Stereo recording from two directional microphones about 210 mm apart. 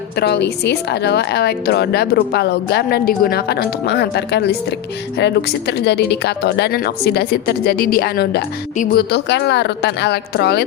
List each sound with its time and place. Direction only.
0.2 s a woman's voice: 50° left (ahead or behind)